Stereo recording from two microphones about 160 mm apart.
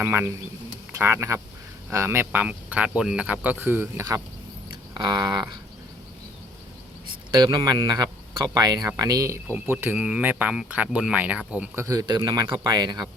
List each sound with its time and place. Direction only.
0.0 s speech: 15° right (ahead or behind)
4.7 s a sound: 25° right (ahead or behind)
7.3 s speech: 25° right (ahead or behind)